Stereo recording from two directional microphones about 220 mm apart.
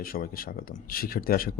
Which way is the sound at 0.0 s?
40° left (ahead or behind).